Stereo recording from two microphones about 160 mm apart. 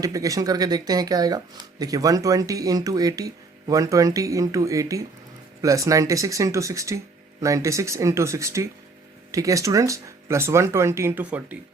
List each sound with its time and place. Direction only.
0.0 s speech: 20° right (ahead or behind)